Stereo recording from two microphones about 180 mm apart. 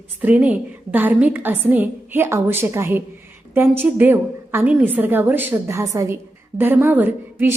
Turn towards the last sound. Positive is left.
turn(degrees=-10)  # may be behind; listen again after turning